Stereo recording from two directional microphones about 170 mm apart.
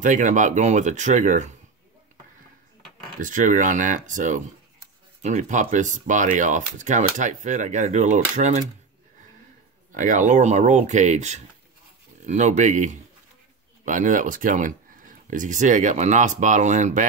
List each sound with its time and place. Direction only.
0.0 s speech: 50° right (ahead or behind)
3.2 s speech: 50° right (ahead or behind)
9.9 s speech: 50° right (ahead or behind)